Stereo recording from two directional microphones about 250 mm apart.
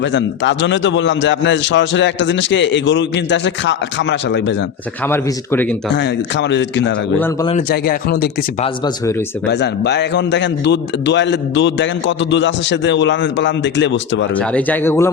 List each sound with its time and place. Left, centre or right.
0.0 s a man's voice: left
5.0 s speech: centre
5.9 s a man's voice: left
9.5 s a man's voice: left
14.3 s speech: centre